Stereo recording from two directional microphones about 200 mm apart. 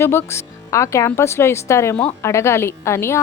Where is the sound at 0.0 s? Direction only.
10° left (ahead or behind).